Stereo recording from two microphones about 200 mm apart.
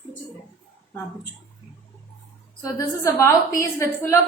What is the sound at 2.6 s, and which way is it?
Speech, 15° left (ahead or behind).